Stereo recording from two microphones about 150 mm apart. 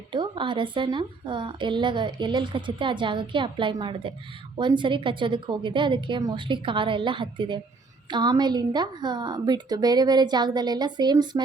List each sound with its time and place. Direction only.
0.1 s a woman's voice: 30° right (ahead or behind)